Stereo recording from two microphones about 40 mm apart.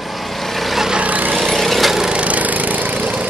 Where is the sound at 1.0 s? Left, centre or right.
Right.